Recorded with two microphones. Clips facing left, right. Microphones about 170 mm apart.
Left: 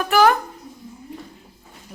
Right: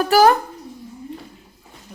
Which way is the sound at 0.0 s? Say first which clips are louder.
Right 3 dB; 35° right (ahead or behind).